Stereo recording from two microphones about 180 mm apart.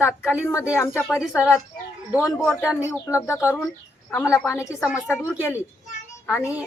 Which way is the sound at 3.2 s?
15° left (ahead or behind).